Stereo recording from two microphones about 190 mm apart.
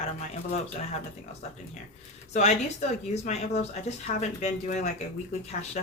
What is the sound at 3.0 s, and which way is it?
Speech, 35° left (ahead or behind).